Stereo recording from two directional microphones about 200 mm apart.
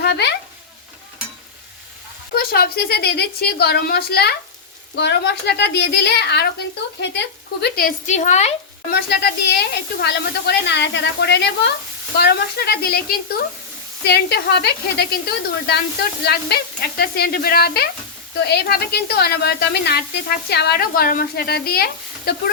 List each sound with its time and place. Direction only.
0.0 s speech: 55° left (ahead or behind)
2.3 s a woman's voice: 50° left (ahead or behind)
8.9 s a woman's voice: 55° left (ahead or behind)